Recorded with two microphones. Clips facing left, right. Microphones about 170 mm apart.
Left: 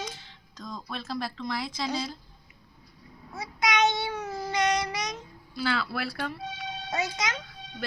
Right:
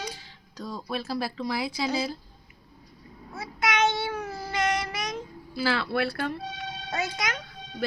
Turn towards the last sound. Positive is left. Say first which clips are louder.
# even
turn(degrees=20)  # may be behind; listen again after turning